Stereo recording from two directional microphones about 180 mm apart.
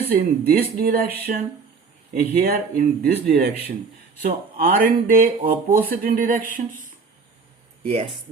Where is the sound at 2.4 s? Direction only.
55° right (ahead or behind).